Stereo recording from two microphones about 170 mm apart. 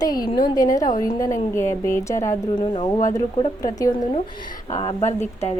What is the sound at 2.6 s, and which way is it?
Speech, 35° left (ahead or behind).